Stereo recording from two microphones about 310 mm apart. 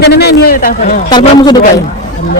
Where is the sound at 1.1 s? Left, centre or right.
Centre.